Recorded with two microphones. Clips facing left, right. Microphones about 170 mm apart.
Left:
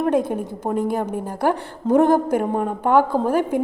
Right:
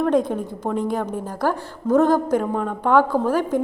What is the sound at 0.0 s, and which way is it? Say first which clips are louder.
Speech: even; 10° left (ahead or behind).